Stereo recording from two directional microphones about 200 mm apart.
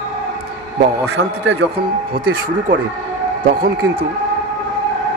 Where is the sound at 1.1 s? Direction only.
65° right (ahead or behind).